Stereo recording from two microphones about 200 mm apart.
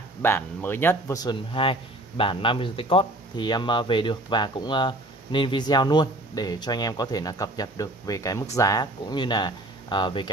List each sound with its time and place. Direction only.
0.2 s speech: 10° left (ahead or behind)